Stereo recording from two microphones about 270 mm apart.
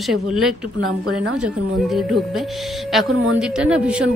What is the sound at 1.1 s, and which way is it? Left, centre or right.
Speech, right.